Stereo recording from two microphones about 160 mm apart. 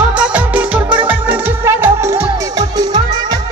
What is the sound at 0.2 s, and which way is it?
Music, 10° right (ahead or behind).